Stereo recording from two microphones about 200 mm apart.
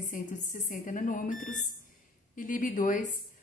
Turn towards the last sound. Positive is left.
turn(degrees=40)  # may be behind; listen again after turning